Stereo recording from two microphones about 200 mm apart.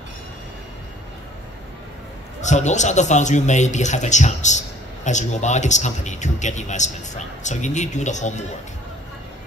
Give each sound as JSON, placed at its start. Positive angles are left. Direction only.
{"t": 2.4, "sound": "speech", "side_deg": 35}